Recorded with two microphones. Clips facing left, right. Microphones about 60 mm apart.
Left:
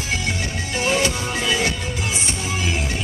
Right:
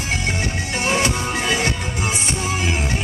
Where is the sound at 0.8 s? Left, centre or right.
Right.